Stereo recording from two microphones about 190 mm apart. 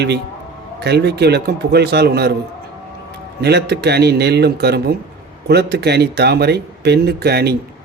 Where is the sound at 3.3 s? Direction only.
60° right (ahead or behind).